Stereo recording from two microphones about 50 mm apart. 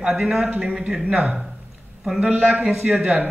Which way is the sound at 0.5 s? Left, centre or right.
Centre.